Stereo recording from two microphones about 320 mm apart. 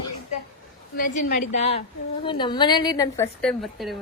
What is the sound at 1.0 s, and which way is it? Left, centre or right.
A woman's voice, left.